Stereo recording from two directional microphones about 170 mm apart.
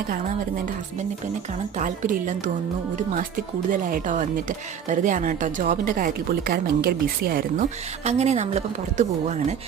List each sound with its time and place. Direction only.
1.8 s speech: 45° right (ahead or behind)
3.7 s a woman's voice: 50° right (ahead or behind)
8.0 s speech: 40° right (ahead or behind)